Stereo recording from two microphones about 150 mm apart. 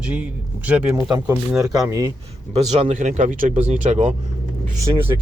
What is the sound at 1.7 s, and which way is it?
Speech, 25° right (ahead or behind).